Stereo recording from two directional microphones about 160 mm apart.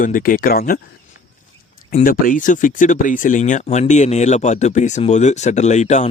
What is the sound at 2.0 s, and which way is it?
Speech, 60° left (ahead or behind).